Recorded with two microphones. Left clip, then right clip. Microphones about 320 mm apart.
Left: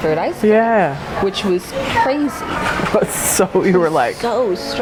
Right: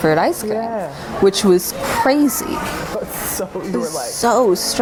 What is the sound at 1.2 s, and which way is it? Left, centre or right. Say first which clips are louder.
Speech: right 5 dB; right.